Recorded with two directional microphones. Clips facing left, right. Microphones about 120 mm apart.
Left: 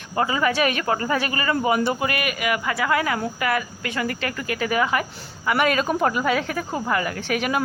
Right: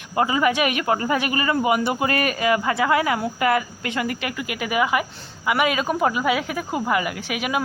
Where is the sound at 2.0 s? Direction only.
35° right (ahead or behind).